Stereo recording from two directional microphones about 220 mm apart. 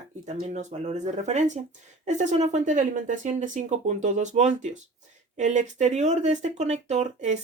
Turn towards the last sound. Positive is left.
turn(degrees=-30)  # may be behind; listen again after turning